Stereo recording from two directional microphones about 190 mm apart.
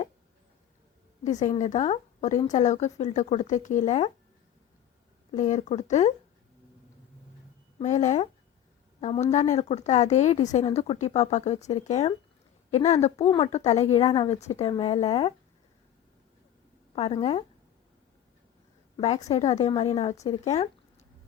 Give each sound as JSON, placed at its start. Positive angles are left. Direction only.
{"t": 1.2, "sound": "speech", "side_deg": 40}
{"t": 5.3, "sound": "speech", "side_deg": 40}
{"t": 7.8, "sound": "speech", "side_deg": 40}
{"t": 10.7, "sound": "speech", "side_deg": 25}
{"t": 16.9, "sound": "speech", "side_deg": 30}
{"t": 18.9, "sound": "speech", "side_deg": 35}